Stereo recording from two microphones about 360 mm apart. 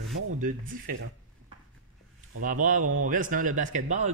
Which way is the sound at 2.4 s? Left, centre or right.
Right.